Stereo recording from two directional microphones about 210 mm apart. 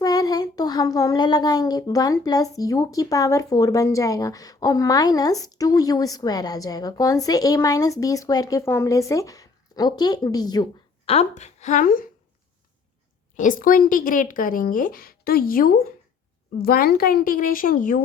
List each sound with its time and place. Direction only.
0.0 s a child's voice: 15° left (ahead or behind); by 12.0 s 40° left (ahead or behind)
13.3 s a woman's voice: 40° left (ahead or behind)